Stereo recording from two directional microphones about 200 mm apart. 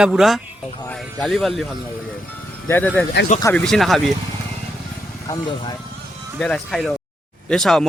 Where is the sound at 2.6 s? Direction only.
10° left (ahead or behind).